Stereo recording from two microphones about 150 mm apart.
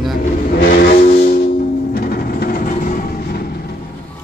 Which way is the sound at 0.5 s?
90° left.